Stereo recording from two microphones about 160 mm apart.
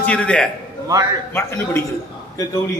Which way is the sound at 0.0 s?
10° left (ahead or behind).